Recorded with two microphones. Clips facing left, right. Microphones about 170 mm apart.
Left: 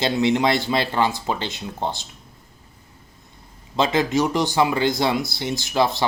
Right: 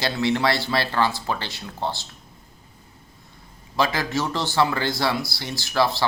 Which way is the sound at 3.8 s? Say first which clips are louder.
Left 4 dB; 20° left (ahead or behind).